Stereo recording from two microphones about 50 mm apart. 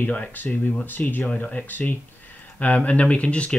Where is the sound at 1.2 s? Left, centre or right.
Left.